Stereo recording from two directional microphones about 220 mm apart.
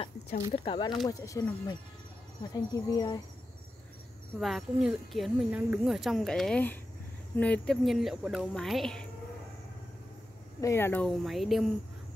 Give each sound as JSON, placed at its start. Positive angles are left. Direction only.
{"t": 0.5, "sound": "speech", "side_deg": 20}
{"t": 4.4, "sound": "speech", "side_deg": 0}
{"t": 10.6, "sound": "speech", "side_deg": 10}